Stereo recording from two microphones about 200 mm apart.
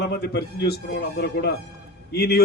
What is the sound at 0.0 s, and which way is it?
A man's voice, 55° left (ahead or behind).